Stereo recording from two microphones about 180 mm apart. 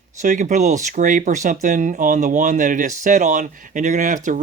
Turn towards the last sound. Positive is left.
turn(degrees=-45)  # may be behind; listen again after turning